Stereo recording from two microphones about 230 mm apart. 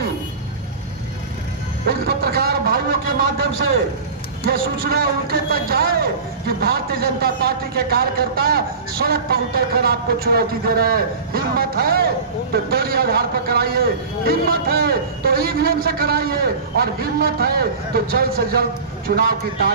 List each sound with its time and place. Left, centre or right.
1.9 s a man's voice: right